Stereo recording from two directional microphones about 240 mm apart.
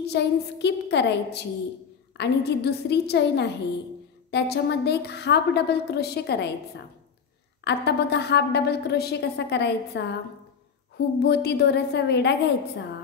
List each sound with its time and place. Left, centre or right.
0.0 s a woman's voice: left
7.6 s a woman's voice: left
11.1 s a woman's voice: left